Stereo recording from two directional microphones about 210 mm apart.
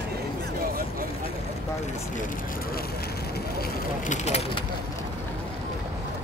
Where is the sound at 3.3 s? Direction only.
40° left (ahead or behind).